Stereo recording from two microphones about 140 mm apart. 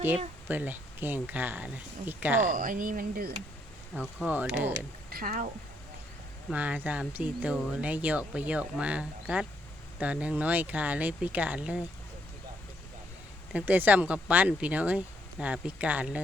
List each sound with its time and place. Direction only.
0.4 s speech: 10° right (ahead or behind)
2.4 s speech: 70° right (ahead or behind); by 3.3 s 90° right
3.9 s speech: 5° right (ahead or behind)
5.1 s speech: 90° right
6.5 s speech: 10° right (ahead or behind)
13.5 s speech: 10° right (ahead or behind)